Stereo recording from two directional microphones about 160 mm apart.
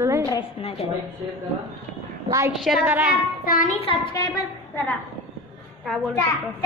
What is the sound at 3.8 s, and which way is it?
Speech, 35° left (ahead or behind).